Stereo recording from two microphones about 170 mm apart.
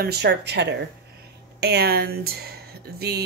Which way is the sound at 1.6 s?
70° right (ahead or behind).